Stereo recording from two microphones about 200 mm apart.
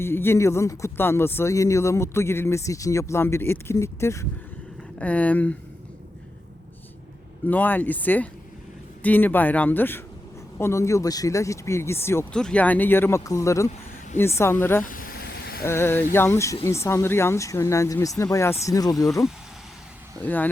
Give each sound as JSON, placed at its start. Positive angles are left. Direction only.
{"t": 0.0, "sound": "speech", "side_deg": 10}
{"t": 7.4, "sound": "speech", "side_deg": 10}
{"t": 14.8, "sound": "vehicle", "side_deg": 45}
{"t": 15.6, "sound": "speech", "side_deg": 10}
{"t": 20.2, "sound": "speech", "side_deg": 10}